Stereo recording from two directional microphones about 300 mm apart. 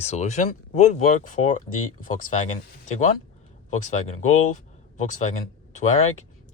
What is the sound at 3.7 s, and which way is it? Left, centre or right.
Speech, left.